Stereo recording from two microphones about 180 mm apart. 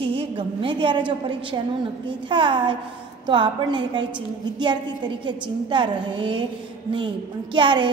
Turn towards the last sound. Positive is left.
turn(degrees=-25)  # may be behind; listen again after turning